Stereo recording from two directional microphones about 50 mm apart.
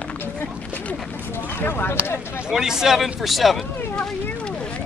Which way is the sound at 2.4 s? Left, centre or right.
Centre.